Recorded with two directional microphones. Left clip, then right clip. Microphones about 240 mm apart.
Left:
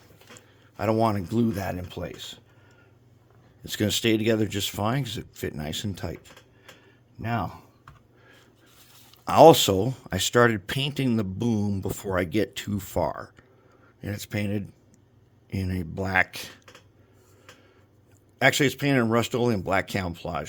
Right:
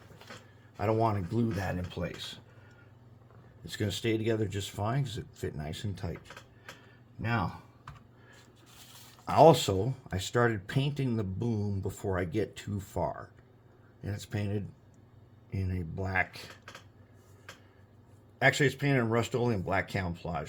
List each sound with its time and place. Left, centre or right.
0.8 s speech: left
3.6 s speech: left
7.2 s speech: left
9.2 s speech: left
18.3 s speech: left